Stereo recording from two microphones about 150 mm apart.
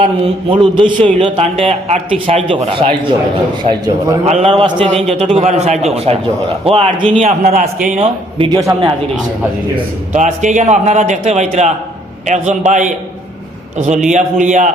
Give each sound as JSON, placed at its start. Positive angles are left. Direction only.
{"t": 0.5, "sound": "a man's voice", "side_deg": -35}
{"t": 3.7, "sound": "speech", "side_deg": -25}
{"t": 4.3, "sound": "a man's voice", "side_deg": -45}
{"t": 7.2, "sound": "a man's voice", "side_deg": -55}
{"t": 8.0, "sound": "a man's voice", "side_deg": -35}
{"t": 10.1, "sound": "a man's voice", "side_deg": -55}